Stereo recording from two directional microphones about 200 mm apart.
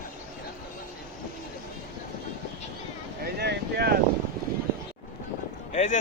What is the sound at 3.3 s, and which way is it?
Vehicle, 55° right (ahead or behind).